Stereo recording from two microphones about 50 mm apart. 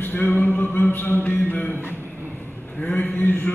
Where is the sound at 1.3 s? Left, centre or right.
Left.